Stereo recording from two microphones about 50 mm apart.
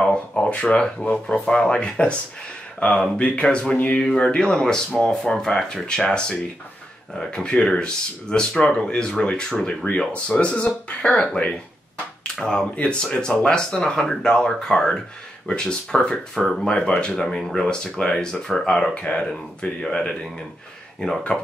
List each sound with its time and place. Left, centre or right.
0.5 s speech: left
3.2 s speech: left
9.8 s speech: left
12.2 s finger snapping: centre
12.7 s speech: left
18.3 s speech: centre
18.9 s speech: centre